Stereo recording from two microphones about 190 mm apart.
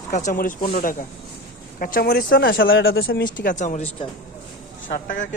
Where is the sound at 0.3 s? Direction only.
45° left (ahead or behind).